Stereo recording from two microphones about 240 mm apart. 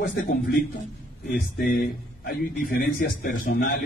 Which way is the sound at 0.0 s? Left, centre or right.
Left.